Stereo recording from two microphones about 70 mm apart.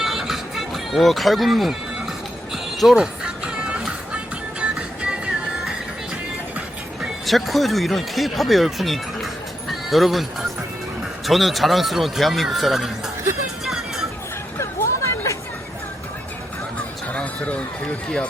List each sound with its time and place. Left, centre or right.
0.0 s music: centre
7.0 s speech: centre
11.3 s speech: centre
13.7 s hubbub: centre
14.8 s chatter: left
16.7 s music: centre